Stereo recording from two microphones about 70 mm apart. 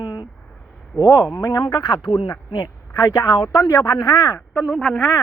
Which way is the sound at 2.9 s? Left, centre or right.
Left.